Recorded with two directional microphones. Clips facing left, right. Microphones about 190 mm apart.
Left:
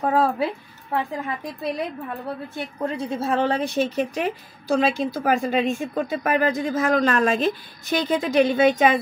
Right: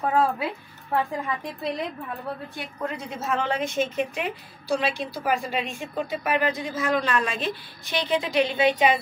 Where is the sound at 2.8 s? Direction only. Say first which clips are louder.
Left 5 dB; 30° left (ahead or behind).